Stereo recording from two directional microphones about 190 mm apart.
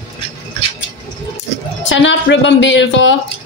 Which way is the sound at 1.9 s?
75° left (ahead or behind).